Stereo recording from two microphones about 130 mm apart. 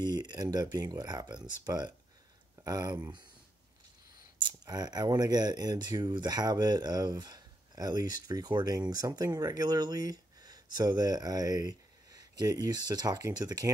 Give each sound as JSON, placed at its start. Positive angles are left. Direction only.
{"t": 0.0, "sound": "speech", "side_deg": -35}
{"t": 4.4, "sound": "speech", "side_deg": -35}